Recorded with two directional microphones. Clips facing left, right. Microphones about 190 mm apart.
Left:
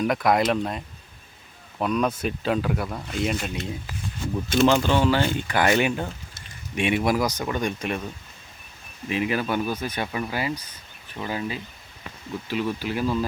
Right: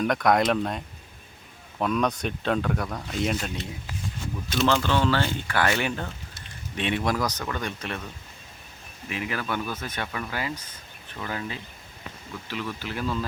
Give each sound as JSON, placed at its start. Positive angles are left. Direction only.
{"t": 0.0, "sound": "speech", "side_deg": 5}
{"t": 1.8, "sound": "speech", "side_deg": 5}
{"t": 4.6, "sound": "speech", "side_deg": 15}
{"t": 9.0, "sound": "speech", "side_deg": 20}